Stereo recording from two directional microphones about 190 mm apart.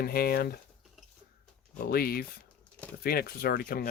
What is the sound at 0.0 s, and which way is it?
Speech, 55° left (ahead or behind).